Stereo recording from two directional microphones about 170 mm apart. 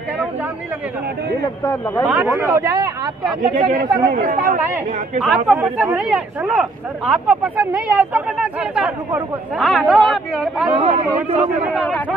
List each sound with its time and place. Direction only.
1.6 s speech: 20° left (ahead or behind)
2.0 s speech: 15° right (ahead or behind)
3.5 s speech: 50° right (ahead or behind)
5.2 s speech: 5° right (ahead or behind)
10.8 s a man's voice: 35° right (ahead or behind)
11.7 s speech: centre (ahead or behind)